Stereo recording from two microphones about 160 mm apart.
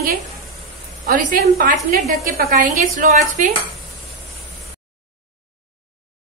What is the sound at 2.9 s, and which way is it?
Speech, 55° right (ahead or behind).